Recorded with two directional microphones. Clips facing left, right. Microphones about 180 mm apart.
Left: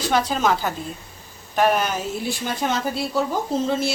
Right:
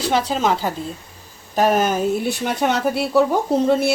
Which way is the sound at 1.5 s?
40° right (ahead or behind).